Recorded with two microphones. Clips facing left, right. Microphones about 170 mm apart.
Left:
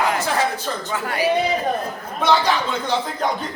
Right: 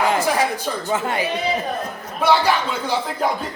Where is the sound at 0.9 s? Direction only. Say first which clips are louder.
Right 4 dB; 25° right (ahead or behind).